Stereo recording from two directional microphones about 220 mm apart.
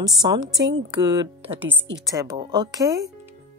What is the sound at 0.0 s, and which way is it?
A woman's voice, 20° right (ahead or behind).